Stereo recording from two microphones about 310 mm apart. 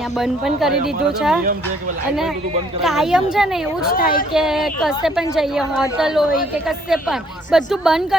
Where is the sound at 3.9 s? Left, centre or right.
Left.